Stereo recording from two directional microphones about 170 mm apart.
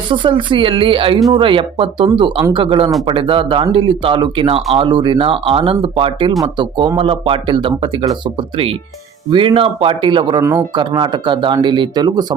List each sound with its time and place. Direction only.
0.1 s speech: 30° right (ahead or behind)